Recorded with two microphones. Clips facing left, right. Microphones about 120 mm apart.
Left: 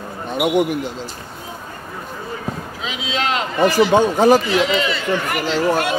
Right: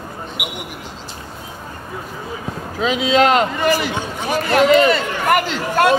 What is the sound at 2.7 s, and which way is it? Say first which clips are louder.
Speech: right 12 dB; 50° right (ahead or behind).